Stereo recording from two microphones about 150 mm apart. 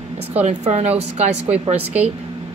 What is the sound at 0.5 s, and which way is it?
Speech, 50° right (ahead or behind).